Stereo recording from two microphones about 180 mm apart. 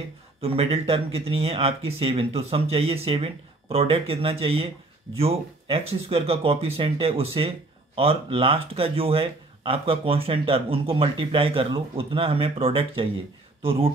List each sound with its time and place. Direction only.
0.4 s speech: 35° right (ahead or behind)